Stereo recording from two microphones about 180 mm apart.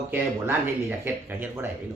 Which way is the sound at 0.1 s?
10° right (ahead or behind).